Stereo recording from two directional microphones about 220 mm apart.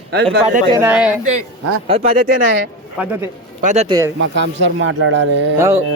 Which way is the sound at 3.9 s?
15° right (ahead or behind).